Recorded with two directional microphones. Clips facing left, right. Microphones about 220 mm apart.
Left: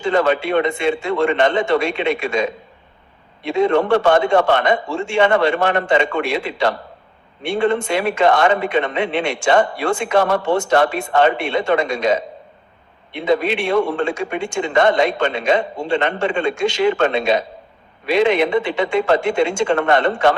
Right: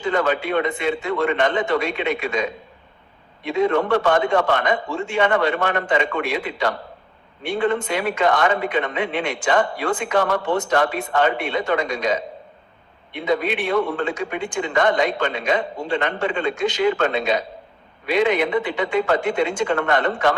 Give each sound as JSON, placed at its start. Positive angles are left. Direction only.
{"t": 0.0, "sound": "a man's voice", "side_deg": 25}